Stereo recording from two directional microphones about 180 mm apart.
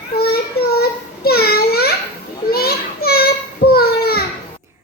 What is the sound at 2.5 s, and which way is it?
Children playing, 60° left (ahead or behind).